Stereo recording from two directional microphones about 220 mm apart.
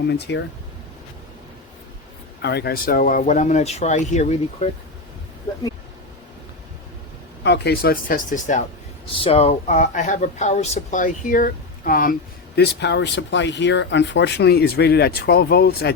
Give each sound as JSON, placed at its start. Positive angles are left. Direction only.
{"t": 0.1, "sound": "speech", "side_deg": 50}
{"t": 2.4, "sound": "speech", "side_deg": 50}
{"t": 7.4, "sound": "speech", "side_deg": 50}
{"t": 12.5, "sound": "speech", "side_deg": 50}